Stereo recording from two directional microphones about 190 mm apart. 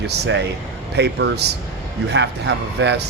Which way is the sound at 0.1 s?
70° right (ahead or behind).